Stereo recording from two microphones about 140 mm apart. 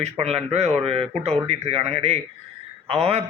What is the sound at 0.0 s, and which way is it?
Speech, 50° right (ahead or behind).